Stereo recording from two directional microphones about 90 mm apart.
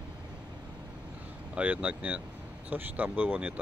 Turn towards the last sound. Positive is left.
turn(degrees=-15)  # may be behind; listen again after turning